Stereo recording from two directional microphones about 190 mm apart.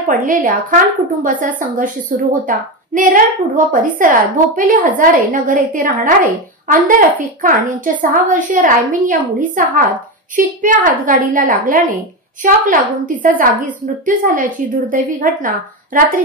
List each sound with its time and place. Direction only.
0.3 s a woman's voice: 45° right (ahead or behind)